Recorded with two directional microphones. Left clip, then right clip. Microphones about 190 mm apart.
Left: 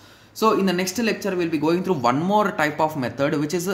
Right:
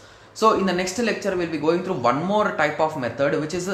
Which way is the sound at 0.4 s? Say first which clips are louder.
Right 1 dB; 35° left (ahead or behind).